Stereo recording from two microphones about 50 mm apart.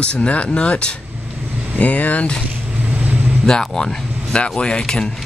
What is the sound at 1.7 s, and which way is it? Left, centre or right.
Speech, left.